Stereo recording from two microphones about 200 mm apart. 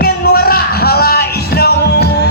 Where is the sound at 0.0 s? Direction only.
50° left (ahead or behind).